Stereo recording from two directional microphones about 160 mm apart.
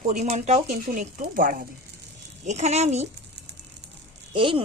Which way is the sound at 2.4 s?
45° right (ahead or behind).